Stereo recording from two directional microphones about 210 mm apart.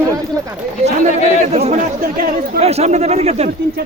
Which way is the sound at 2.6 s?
30° right (ahead or behind).